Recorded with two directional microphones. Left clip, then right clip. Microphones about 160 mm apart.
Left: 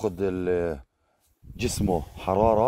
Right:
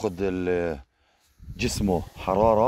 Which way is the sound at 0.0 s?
55° left (ahead or behind).